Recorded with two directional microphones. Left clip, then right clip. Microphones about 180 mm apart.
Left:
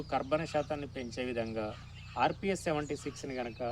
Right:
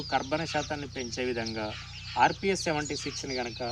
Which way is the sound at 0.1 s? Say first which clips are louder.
Right 3 dB; 25° left (ahead or behind).